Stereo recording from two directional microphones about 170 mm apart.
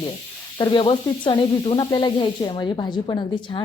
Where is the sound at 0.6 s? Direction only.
25° left (ahead or behind).